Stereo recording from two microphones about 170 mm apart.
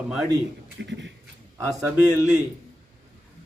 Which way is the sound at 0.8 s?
90° right.